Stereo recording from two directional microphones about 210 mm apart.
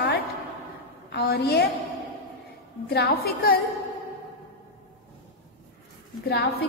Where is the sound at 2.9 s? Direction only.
50° left (ahead or behind).